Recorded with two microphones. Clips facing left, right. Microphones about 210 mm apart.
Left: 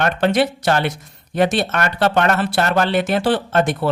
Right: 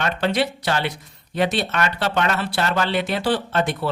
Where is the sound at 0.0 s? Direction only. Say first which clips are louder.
Left 5 dB; 50° left (ahead or behind).